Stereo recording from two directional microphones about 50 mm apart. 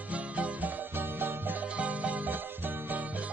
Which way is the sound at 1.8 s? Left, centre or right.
Right.